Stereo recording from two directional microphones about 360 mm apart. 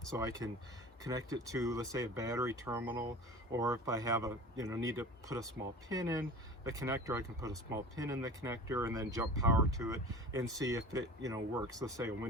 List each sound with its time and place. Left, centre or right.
0.2 s speech: centre